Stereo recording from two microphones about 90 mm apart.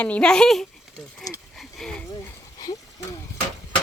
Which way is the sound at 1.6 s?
5° left (ahead or behind).